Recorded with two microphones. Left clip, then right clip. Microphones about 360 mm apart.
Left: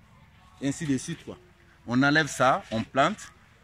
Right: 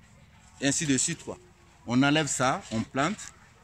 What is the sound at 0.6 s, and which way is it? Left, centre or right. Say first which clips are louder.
Speech: right 3 dB; right.